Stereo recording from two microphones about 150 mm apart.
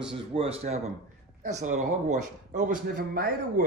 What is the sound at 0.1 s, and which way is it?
A man's voice, 40° right (ahead or behind).